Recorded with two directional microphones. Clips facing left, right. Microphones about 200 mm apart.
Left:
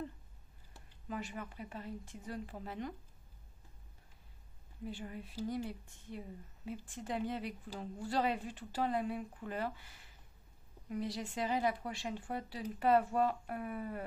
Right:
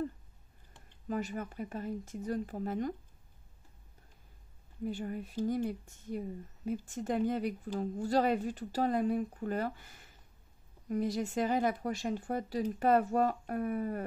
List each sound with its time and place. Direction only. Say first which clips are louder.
1.0 s speech: right 7 dB; 40° right (ahead or behind)
4.8 s speech: right 7 dB; 45° right (ahead or behind)